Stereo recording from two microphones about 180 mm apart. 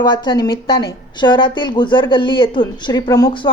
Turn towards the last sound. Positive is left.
turn(degrees=25)  # may be behind; listen again after turning